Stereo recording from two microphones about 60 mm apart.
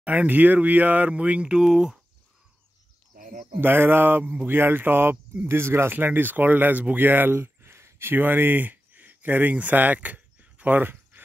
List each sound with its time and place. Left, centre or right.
0.0 s speech: right
3.6 s speech: right
5.5 s speech: right